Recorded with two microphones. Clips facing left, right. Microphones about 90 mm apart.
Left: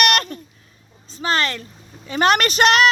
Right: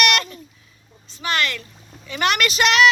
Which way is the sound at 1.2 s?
35° left (ahead or behind).